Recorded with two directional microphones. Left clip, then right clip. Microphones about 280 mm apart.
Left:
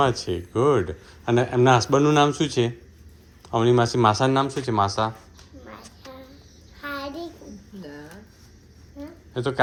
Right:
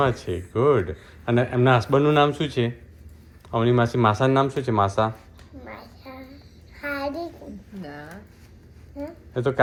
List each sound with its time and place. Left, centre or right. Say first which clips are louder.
0.0 s speech: left 1 dB; centre
5.6 s a sound: right 2 dB; centre
9.3 s speech: right 2 dB; centre